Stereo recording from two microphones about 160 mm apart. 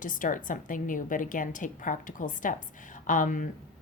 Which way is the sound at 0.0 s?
55° left (ahead or behind).